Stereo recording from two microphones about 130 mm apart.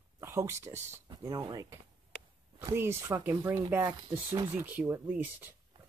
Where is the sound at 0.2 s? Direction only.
20° right (ahead or behind).